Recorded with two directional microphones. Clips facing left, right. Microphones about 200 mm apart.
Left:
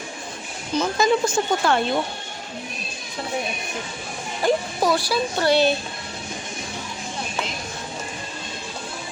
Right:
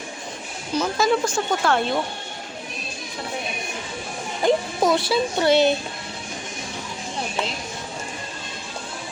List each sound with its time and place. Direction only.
0.7 s speech: 5° right (ahead or behind)
4.4 s speech: 20° right (ahead or behind)